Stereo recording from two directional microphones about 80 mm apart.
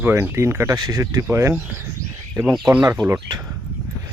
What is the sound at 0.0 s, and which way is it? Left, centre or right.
Speech, right.